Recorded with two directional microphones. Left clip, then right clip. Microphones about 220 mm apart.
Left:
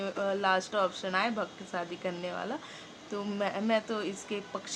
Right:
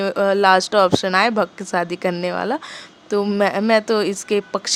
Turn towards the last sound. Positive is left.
turn(degrees=-45)  # may be behind; listen again after turning